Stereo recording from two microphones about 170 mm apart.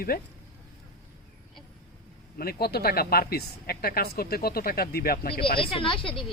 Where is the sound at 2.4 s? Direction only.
65° left (ahead or behind).